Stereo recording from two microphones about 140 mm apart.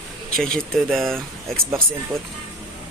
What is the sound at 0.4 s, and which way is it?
Speech, 5° left (ahead or behind).